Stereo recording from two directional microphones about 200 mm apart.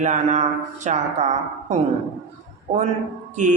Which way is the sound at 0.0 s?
35° right (ahead or behind).